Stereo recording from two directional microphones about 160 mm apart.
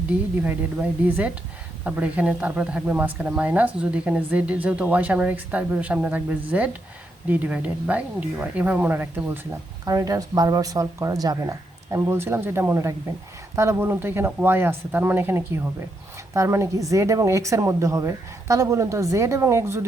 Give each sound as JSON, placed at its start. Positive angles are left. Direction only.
{"t": 0.4, "sound": "speech", "side_deg": -10}